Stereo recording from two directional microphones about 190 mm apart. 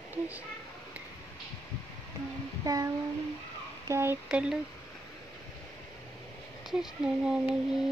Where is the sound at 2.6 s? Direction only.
20° right (ahead or behind).